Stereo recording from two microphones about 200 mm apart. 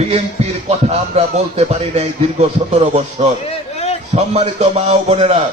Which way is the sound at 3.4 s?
30° left (ahead or behind).